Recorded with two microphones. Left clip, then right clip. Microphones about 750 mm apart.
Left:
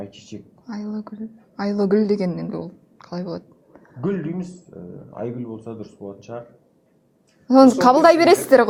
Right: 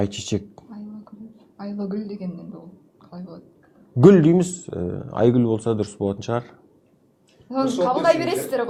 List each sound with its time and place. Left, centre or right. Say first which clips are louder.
0.0 s speech: right 10 dB; right
1.5 s a woman's voice: left 11 dB; left
4.0 s speech: right 13 dB; right
7.4 s a woman's voice: left 9 dB; left